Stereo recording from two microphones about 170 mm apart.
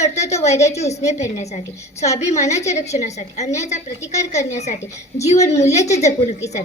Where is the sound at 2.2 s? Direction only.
40° left (ahead or behind).